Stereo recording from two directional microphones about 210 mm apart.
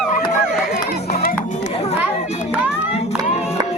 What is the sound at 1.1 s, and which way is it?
Music, 45° left (ahead or behind).